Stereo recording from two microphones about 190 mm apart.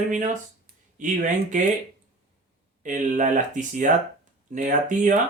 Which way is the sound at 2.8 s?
40° right (ahead or behind).